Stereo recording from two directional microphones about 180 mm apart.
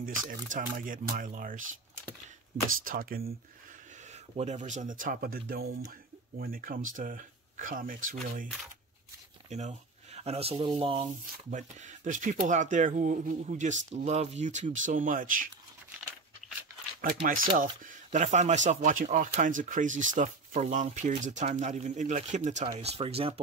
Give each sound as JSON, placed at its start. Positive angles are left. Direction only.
{"t": 0.3, "sound": "speech", "side_deg": -50}
{"t": 2.8, "sound": "speech", "side_deg": -55}
{"t": 4.0, "sound": "speech", "side_deg": -40}
{"t": 9.5, "sound": "speech", "side_deg": -40}
{"t": 11.5, "sound": "speech", "side_deg": -45}
{"t": 17.0, "sound": "speech", "side_deg": -50}